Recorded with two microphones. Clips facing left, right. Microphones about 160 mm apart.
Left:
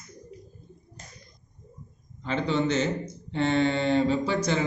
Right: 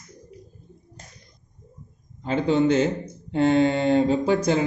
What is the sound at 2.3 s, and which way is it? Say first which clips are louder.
A man's voice: right 6 dB; 45° right (ahead or behind).